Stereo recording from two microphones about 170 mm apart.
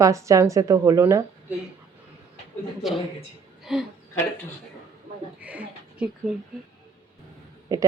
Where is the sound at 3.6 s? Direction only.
Centre (ahead or behind).